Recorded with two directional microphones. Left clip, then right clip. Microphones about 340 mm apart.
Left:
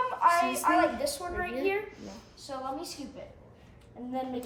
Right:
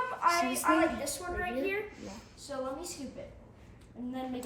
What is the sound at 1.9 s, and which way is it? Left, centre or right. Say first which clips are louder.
Speech: even; centre.